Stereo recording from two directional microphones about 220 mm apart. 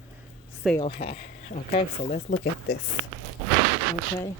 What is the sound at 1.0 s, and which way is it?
Speech, 45° left (ahead or behind).